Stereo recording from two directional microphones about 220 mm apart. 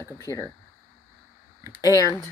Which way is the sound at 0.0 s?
15° left (ahead or behind).